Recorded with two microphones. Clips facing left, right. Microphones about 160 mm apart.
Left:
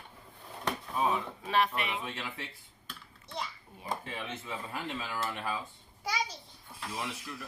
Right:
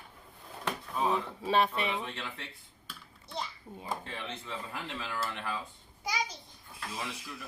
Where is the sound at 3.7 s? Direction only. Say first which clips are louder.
Right 7 dB; 25° right (ahead or behind).